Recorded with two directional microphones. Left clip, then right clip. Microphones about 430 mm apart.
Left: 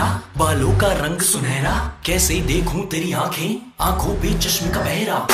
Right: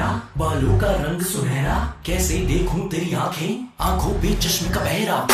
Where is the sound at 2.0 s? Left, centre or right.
Centre.